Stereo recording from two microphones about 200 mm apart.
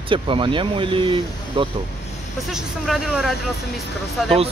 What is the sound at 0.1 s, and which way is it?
Speech, 25° right (ahead or behind).